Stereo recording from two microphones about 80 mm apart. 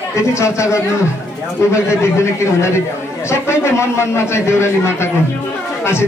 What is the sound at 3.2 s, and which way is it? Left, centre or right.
A man's voice, left.